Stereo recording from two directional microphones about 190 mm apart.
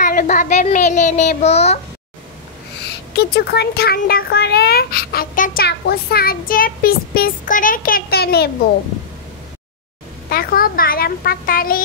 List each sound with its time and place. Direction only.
0.0 s a child's voice: 45° left (ahead or behind)
2.8 s speech: 60° left (ahead or behind)
10.3 s speech: 50° left (ahead or behind)